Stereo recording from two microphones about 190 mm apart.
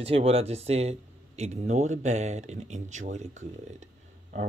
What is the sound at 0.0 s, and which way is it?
Speech, 30° right (ahead or behind).